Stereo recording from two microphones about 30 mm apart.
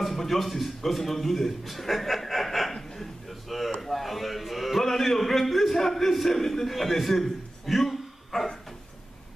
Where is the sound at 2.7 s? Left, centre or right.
Centre.